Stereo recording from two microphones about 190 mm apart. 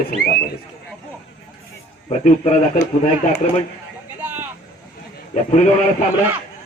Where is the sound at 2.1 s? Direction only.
35° left (ahead or behind).